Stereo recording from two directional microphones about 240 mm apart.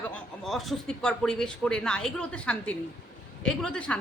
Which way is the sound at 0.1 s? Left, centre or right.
Centre.